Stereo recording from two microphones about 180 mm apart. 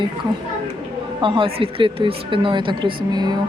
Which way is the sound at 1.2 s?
30° right (ahead or behind).